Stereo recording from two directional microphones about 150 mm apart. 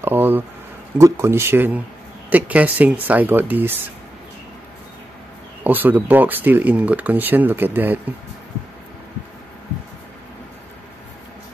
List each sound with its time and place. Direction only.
0.0 s a sound: 15° right (ahead or behind)
0.9 s speech: 20° right (ahead or behind)
5.6 s speech: 10° right (ahead or behind)